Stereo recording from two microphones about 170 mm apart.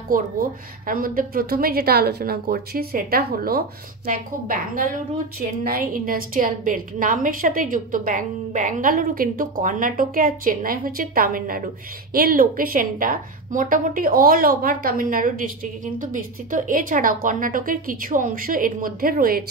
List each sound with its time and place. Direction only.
0.1 s speech: 55° right (ahead or behind)